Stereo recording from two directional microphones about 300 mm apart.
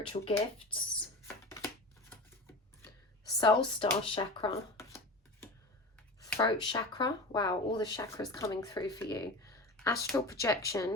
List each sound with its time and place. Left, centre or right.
0.1 s speech: centre
1.5 s a sound: centre
3.3 s speech: centre
6.1 s speech: centre
10.1 s speech: centre